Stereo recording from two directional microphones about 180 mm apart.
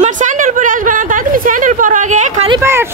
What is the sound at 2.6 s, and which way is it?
Speech, 15° right (ahead or behind).